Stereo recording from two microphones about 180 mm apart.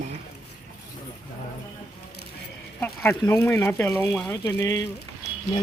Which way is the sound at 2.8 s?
10° left (ahead or behind).